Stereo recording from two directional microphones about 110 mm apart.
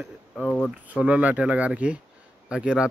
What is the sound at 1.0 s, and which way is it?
Speech, 10° right (ahead or behind).